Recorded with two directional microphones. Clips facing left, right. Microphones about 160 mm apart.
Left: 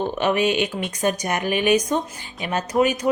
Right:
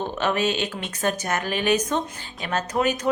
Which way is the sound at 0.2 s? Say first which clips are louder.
Left 3 dB; 15° left (ahead or behind).